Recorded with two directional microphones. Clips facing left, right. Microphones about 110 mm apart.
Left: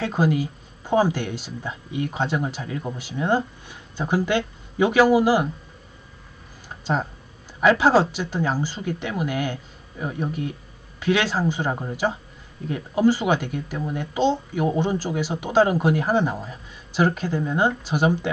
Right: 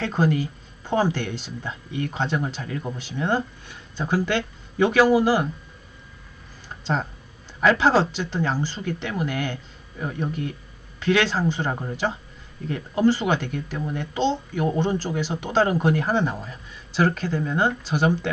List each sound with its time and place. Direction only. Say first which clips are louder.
0.0 s speech: left 1 dB; 10° left (ahead or behind)
6.7 s a sound: left 1 dB; 10° left (ahead or behind)
7.6 s speech: left 2 dB; 15° left (ahead or behind)